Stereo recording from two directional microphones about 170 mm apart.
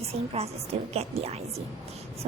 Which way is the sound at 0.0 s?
35° right (ahead or behind).